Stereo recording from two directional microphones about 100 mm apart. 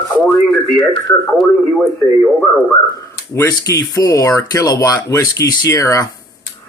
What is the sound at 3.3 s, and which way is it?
Speech, 35° left (ahead or behind).